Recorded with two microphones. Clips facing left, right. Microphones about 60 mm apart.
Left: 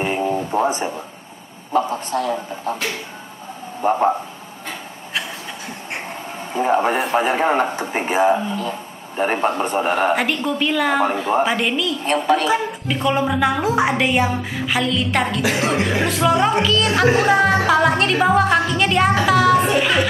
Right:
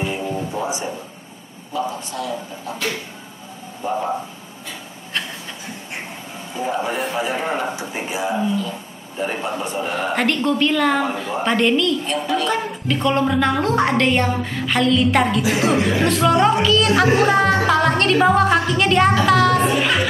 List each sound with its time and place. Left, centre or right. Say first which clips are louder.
0.0 s a sound: left 4 dB; left
1.7 s speech: left 5 dB; left
3.8 s speech: left 5 dB; left
6.5 s a man's voice: left 6 dB; left
10.1 s speech: right 2 dB; centre
12.0 s speech: left 4 dB; left
12.4 s a woman's voice: left 2 dB; centre